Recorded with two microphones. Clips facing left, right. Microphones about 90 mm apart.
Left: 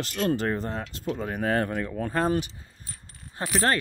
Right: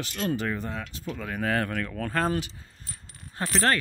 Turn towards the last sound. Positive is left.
turn(degrees=10)  # may be behind; listen again after turning